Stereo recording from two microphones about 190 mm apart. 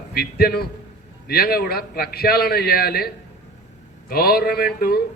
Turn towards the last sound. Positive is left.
turn(degrees=50)  # may be behind; listen again after turning